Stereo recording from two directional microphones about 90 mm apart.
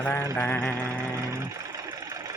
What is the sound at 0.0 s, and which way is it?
Mantra, 20° left (ahead or behind).